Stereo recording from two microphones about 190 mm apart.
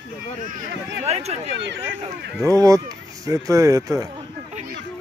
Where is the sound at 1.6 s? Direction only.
65° right (ahead or behind).